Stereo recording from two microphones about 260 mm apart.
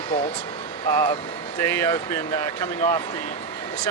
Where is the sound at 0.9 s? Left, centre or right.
Centre.